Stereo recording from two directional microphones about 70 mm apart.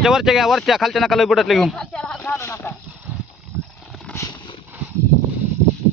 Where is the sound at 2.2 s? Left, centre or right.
Left.